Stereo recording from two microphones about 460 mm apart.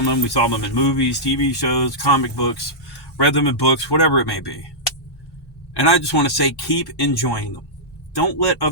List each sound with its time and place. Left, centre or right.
0.0 s speech: left
5.7 s speech: left